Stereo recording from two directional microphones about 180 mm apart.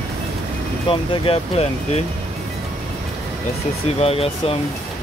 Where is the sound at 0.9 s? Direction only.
30° left (ahead or behind).